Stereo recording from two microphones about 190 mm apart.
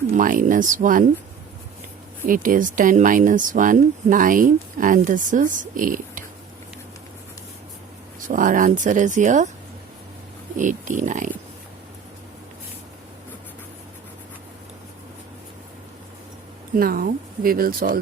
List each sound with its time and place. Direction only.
0.1 s speech: 45° right (ahead or behind)
2.2 s speech: 45° right (ahead or behind)
8.3 s speech: 45° right (ahead or behind)
10.6 s speech: 40° right (ahead or behind)
16.7 s speech: 50° right (ahead or behind)